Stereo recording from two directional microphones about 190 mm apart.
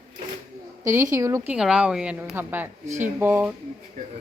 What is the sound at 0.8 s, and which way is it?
Speech, 15° right (ahead or behind).